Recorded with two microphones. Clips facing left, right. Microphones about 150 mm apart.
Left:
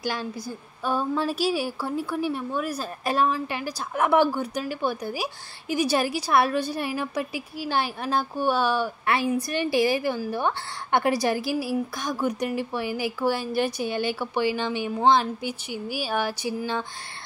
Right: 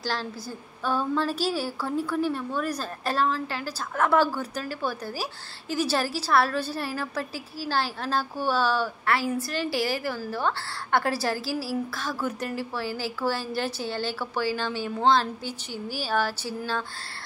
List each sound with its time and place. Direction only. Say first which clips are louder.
0.0 s a woman's voice: left 2 dB; 15° left (ahead or behind)